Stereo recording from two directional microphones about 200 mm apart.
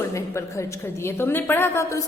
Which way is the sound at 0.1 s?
15° left (ahead or behind).